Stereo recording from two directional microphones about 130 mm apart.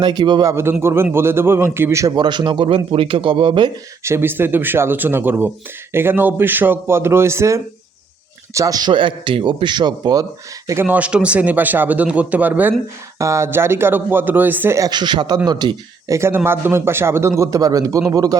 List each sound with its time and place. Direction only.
0.0 s a man's voice: 35° right (ahead or behind)
0.5 s a man's voice: 20° right (ahead or behind); by 3.7 s 40° right (ahead or behind)
4.0 s a man's voice: 20° right (ahead or behind)
8.9 s a man's voice: 40° right (ahead or behind)
10.8 s a man's voice: 10° right (ahead or behind)
14.8 s a man's voice: 35° right (ahead or behind)
16.1 s a man's voice: 20° right (ahead or behind)